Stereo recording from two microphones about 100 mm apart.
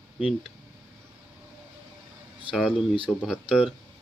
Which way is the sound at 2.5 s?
Centre (ahead or behind).